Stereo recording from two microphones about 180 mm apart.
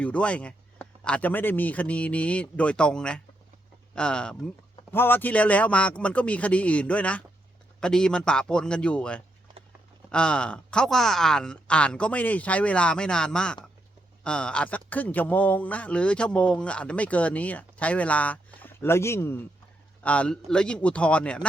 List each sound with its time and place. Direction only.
0.0 s speech: 5° left (ahead or behind)